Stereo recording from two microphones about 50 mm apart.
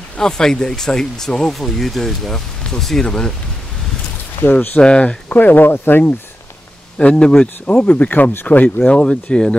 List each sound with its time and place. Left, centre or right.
0.2 s speech: centre
4.4 s speech: left
4.7 s speech: left
5.3 s speech: left
7.0 s speech: left
7.8 s speech: left
8.5 s speech: left